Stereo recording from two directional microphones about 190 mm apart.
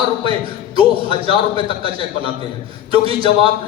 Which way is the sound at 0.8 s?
30° right (ahead or behind).